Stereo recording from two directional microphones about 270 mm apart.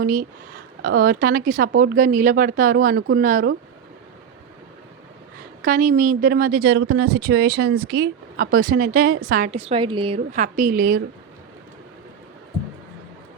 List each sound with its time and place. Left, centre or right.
0.0 s speech: right
5.6 s speech: right